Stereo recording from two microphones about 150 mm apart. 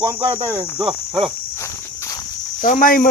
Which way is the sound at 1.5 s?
20° left (ahead or behind).